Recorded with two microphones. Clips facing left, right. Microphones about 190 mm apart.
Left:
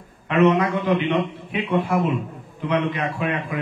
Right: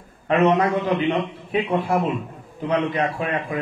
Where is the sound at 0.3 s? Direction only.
35° right (ahead or behind).